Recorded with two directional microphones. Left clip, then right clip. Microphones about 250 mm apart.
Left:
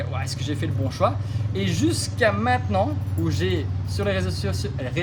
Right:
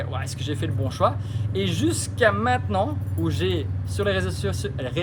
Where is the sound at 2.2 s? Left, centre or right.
Centre.